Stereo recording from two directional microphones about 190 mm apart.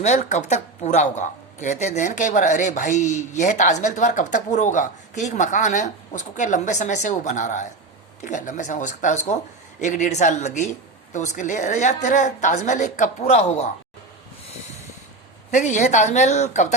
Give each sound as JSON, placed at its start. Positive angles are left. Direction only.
{"t": 0.0, "sound": "a woman's voice", "side_deg": 35}
{"t": 15.5, "sound": "a woman's voice", "side_deg": 40}